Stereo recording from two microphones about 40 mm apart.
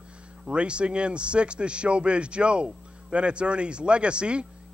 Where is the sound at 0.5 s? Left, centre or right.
Right.